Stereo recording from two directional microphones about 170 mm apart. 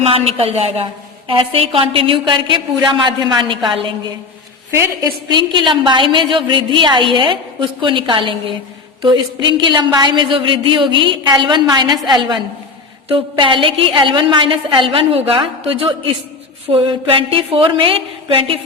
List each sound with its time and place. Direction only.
0.0 s a woman's voice: 35° right (ahead or behind)
5.5 s a woman's voice: 30° right (ahead or behind)